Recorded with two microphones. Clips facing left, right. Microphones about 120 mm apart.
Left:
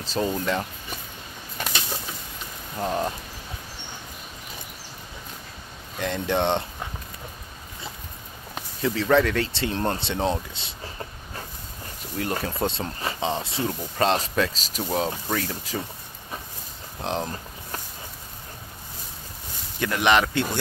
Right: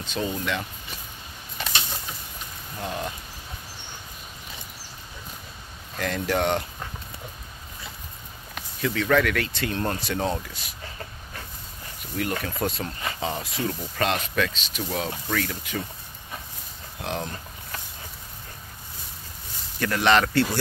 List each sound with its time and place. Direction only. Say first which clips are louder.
0.0 s speech: left 3 dB; 35° left (ahead or behind)
2.8 s speech: left 5 dB; 35° left (ahead or behind)
5.9 s speech: left 1 dB; 20° left (ahead or behind)
8.8 s speech: left 2 dB; 30° left (ahead or behind)
12.2 s speech: left 1 dB; 30° left (ahead or behind)
17.0 s speech: left 3 dB; 30° left (ahead or behind)
19.8 s a man's voice: even; 15° left (ahead or behind)